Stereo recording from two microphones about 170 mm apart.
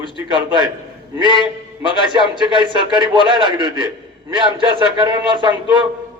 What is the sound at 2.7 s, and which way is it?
A man's voice, 30° right (ahead or behind).